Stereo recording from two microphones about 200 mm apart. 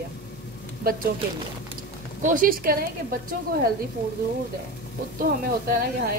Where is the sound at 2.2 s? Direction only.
45° right (ahead or behind).